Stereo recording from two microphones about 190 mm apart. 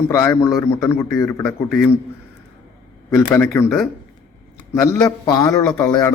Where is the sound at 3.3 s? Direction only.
10° left (ahead or behind).